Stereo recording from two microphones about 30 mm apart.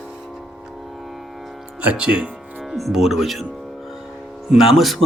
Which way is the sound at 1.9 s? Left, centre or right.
Right.